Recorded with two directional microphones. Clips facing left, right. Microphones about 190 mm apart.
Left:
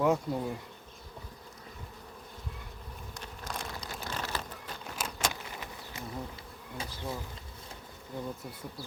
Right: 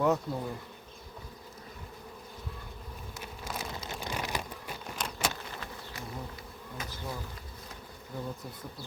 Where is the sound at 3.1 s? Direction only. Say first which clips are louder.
Right 1 dB; 5° right (ahead or behind).